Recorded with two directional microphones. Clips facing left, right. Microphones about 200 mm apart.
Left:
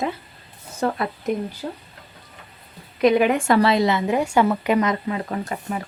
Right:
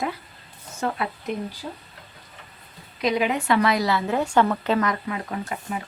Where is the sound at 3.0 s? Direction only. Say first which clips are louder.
Left 6 dB; 55° left (ahead or behind).